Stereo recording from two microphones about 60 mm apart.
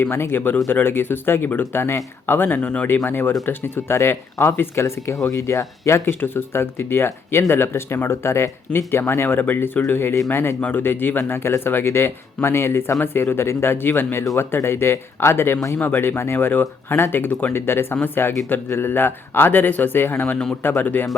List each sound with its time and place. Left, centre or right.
0.0 s speech: left
4.8 s speech: left
6.1 s speech: left
10.6 s speech: left